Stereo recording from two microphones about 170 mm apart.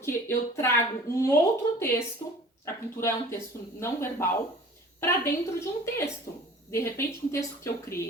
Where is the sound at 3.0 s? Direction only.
15° left (ahead or behind).